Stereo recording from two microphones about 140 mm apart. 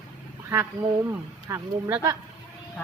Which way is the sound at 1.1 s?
15° right (ahead or behind).